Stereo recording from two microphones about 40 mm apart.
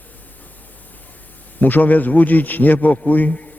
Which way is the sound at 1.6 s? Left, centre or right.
Left.